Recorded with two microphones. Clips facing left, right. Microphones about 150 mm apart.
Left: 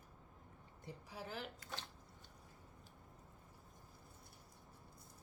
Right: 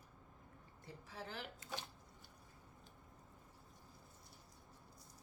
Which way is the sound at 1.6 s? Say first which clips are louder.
Right 2 dB; 15° right (ahead or behind).